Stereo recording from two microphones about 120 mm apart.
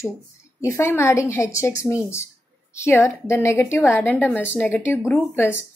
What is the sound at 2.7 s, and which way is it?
A woman's voice, 20° left (ahead or behind).